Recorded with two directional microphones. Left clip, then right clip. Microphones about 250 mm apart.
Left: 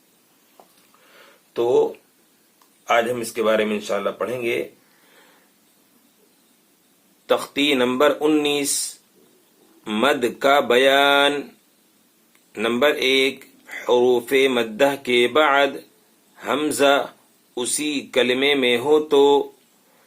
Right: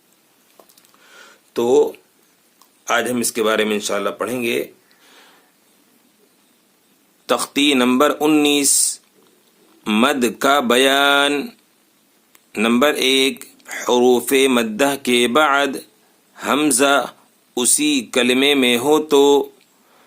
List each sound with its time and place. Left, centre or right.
2.8 s speech: right
7.3 s speech: right
12.5 s speech: right